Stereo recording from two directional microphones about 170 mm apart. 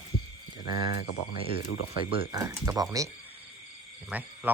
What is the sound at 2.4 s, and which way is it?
A man's voice, 20° right (ahead or behind).